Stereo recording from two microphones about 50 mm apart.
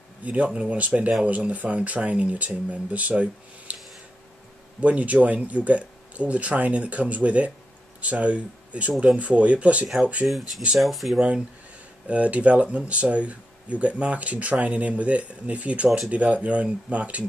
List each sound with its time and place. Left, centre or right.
0.2 s speech: right
4.7 s speech: right
10.2 s speech: centre
11.1 s speech: right